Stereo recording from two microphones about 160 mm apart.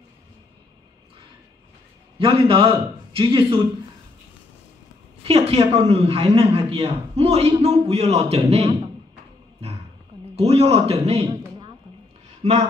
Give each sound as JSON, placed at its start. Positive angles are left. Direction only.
{"t": 2.1, "sound": "a man's voice", "side_deg": -35}
{"t": 5.2, "sound": "a man's voice", "side_deg": -40}
{"t": 10.3, "sound": "a man's voice", "side_deg": -40}
{"t": 12.4, "sound": "speech", "side_deg": -45}